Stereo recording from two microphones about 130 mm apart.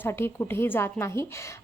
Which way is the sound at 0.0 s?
20° left (ahead or behind).